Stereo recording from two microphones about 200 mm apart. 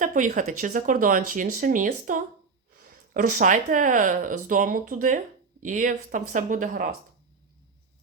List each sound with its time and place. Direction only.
0.0 s speech: 40° right (ahead or behind)